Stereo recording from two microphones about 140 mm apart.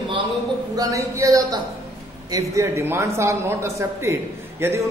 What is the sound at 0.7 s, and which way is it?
Speech, 25° right (ahead or behind).